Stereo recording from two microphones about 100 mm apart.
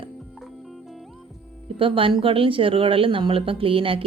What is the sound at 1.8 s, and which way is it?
A woman's voice, 60° right (ahead or behind).